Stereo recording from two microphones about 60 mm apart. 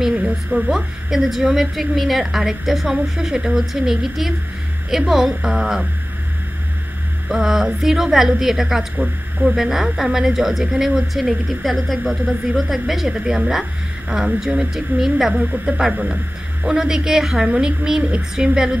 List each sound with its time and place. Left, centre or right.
0.1 s speech: centre
0.7 s a woman's voice: centre
5.4 s speech: right
7.2 s speech: centre
8.9 s speech: right
9.6 s a woman's voice: centre
15.7 s speech: right
16.6 s speech: centre